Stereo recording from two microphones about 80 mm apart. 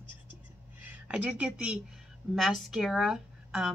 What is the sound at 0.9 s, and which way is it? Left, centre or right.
Speech, centre.